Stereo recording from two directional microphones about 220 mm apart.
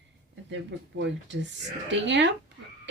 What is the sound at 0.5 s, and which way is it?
Speech, 55° right (ahead or behind).